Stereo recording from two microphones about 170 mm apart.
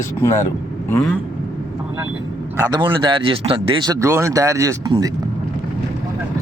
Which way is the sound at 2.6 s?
25° right (ahead or behind).